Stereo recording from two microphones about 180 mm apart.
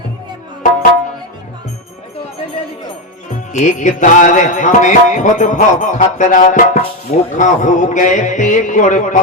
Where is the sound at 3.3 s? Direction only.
45° left (ahead or behind).